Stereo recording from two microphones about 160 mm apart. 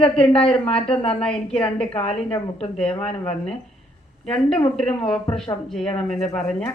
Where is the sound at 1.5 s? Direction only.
35° left (ahead or behind).